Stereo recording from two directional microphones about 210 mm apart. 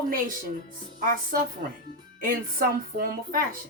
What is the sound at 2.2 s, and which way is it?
A woman's voice, 40° right (ahead or behind).